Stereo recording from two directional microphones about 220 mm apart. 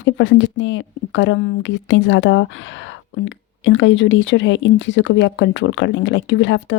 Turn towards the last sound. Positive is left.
turn(degrees=60)  # may be behind; listen again after turning